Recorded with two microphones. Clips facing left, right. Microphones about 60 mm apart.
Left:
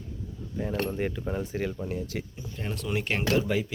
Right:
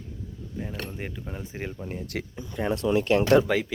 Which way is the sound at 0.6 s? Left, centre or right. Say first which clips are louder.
Left 6 dB; centre.